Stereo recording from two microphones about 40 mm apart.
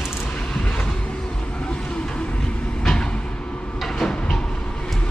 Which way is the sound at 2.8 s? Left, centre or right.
Centre.